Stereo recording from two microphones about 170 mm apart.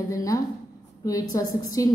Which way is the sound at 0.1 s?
20° left (ahead or behind).